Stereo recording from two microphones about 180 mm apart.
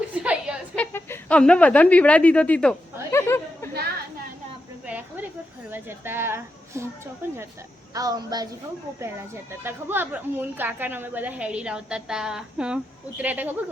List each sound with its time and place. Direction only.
0.1 s a sound: 5° right (ahead or behind)
0.8 s speech: 10° left (ahead or behind)
3.1 s chatter: 15° left (ahead or behind)
4.9 s a sound: 10° right (ahead or behind)
5.7 s a woman's voice: 10° right (ahead or behind)
7.9 s a woman's voice: 20° right (ahead or behind)